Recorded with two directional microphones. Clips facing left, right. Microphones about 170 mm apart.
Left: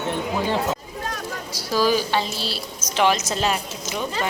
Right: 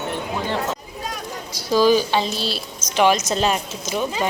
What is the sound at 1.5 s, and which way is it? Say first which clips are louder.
Speech: right 5 dB; 20° right (ahead or behind).